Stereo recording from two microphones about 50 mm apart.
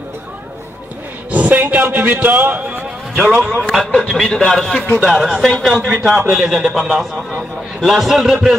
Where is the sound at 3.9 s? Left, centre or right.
Left.